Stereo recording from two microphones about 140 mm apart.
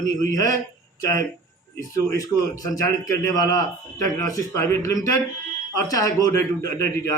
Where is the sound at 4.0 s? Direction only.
20° left (ahead or behind).